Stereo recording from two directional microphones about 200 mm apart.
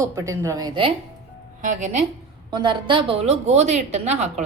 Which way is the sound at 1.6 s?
40° right (ahead or behind).